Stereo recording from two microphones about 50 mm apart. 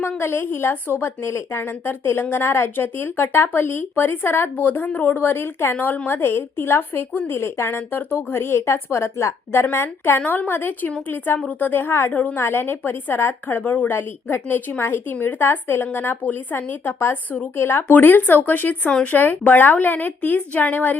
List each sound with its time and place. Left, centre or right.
0.0 s a woman's voice: left
5.7 s a woman's voice: left
10.2 s a woman's voice: left
15.1 s a woman's voice: left
15.4 s speech: left
17.6 s a woman's voice: left
17.8 s a woman's voice: left